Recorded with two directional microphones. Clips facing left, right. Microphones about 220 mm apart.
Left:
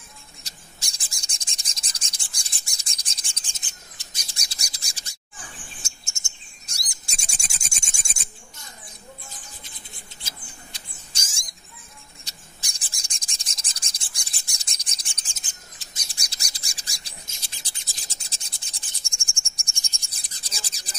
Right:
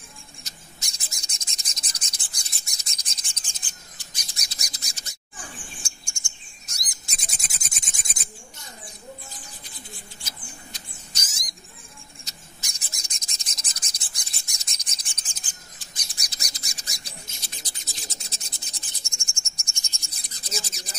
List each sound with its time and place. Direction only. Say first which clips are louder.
0.4 s rub: right 1 dB; 30° left (ahead or behind)
5.8 s chirp: right 1 dB; 20° left (ahead or behind)
10.2 s bird: right 1 dB; 30° left (ahead or behind)
12.3 s rub: right 1 dB; 30° left (ahead or behind)